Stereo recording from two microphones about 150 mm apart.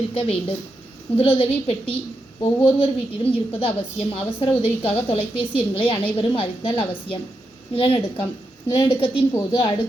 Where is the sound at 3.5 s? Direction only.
40° left (ahead or behind).